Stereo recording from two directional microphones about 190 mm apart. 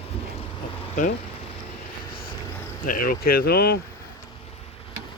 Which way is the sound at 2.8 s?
50° left (ahead or behind).